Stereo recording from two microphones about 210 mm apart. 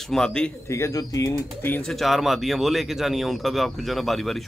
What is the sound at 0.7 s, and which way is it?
Speech, 15° left (ahead or behind).